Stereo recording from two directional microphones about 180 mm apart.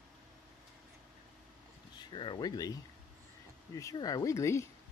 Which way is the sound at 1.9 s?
25° left (ahead or behind).